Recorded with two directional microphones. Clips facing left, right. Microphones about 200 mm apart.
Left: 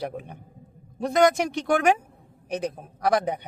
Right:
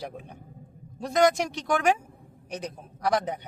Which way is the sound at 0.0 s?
60° left (ahead or behind).